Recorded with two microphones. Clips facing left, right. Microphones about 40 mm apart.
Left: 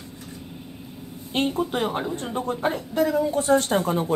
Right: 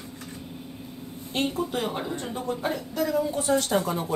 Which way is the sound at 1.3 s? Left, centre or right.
Left.